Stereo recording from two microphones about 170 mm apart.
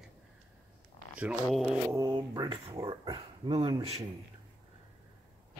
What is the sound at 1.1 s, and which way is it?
Speech, 5° right (ahead or behind).